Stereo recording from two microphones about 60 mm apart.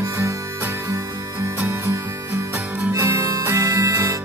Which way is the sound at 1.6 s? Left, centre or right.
Right.